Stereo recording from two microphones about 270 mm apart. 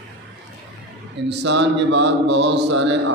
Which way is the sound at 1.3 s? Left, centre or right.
Right.